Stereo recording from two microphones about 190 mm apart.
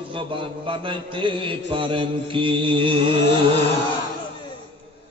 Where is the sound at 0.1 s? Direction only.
25° right (ahead or behind).